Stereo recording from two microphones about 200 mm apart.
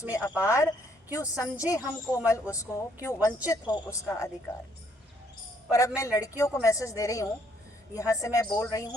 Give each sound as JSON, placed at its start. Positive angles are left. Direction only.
{"t": 0.1, "sound": "speech", "side_deg": 15}
{"t": 5.7, "sound": "speech", "side_deg": 15}